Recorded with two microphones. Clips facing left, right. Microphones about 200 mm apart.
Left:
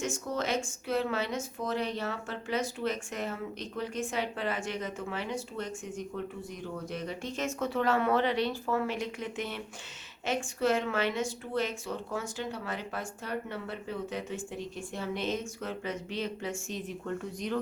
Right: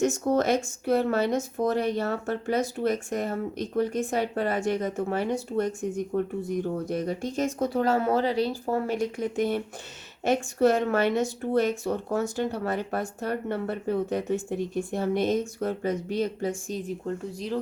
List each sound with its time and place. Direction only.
0.0 s speech: 45° right (ahead or behind)